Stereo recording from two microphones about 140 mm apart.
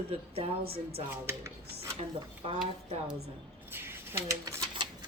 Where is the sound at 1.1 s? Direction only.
20° right (ahead or behind).